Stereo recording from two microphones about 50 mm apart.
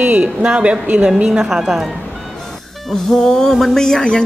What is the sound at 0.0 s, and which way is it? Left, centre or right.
Speech, right.